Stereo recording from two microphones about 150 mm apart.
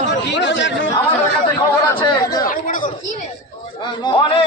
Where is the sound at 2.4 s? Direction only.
65° left (ahead or behind).